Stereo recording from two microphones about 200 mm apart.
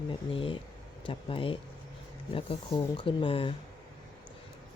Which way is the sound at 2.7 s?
25° left (ahead or behind).